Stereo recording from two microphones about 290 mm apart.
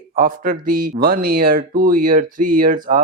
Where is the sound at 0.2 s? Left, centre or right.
Right.